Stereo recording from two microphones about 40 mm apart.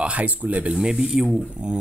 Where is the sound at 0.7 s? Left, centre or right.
Centre.